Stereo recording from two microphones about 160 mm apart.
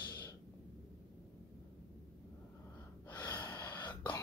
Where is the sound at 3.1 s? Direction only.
25° left (ahead or behind).